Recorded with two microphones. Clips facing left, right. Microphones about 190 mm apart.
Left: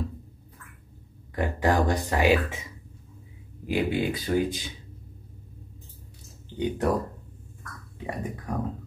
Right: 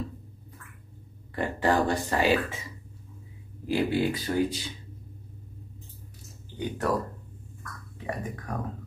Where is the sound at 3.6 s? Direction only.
15° left (ahead or behind).